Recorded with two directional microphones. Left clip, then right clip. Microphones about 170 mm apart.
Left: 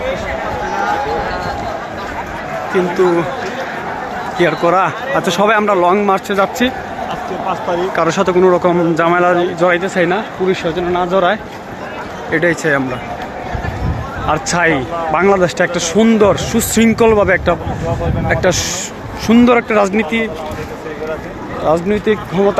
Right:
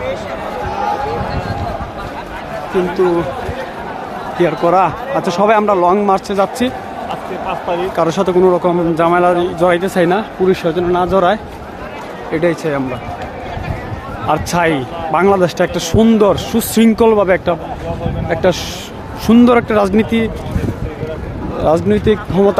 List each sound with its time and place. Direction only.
4.4 s speech: 15° right (ahead or behind)
7.9 s a man's voice: 20° right (ahead or behind)
8.4 s a man's voice: 10° right (ahead or behind)
9.8 s speech: 35° right (ahead or behind)
12.3 s speech: 10° right (ahead or behind)
14.3 s a man's voice: 15° right (ahead or behind)
19.3 s speech: 35° right (ahead or behind)
21.6 s speech: 45° right (ahead or behind)